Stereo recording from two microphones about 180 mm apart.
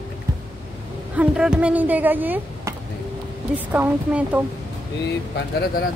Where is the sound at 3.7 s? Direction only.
10° right (ahead or behind).